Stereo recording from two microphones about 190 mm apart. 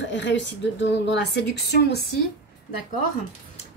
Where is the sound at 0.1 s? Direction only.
70° left (ahead or behind).